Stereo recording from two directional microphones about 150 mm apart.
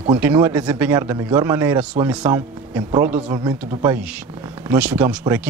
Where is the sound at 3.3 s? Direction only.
30° right (ahead or behind).